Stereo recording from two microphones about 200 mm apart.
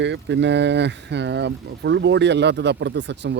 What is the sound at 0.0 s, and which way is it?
Speech, 60° right (ahead or behind).